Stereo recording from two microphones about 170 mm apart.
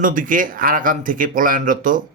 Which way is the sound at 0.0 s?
50° right (ahead or behind).